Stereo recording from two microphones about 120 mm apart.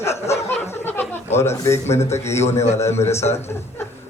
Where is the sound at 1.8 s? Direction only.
65° left (ahead or behind).